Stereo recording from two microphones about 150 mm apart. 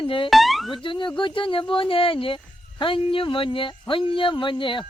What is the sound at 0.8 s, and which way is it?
Speech, 30° left (ahead or behind).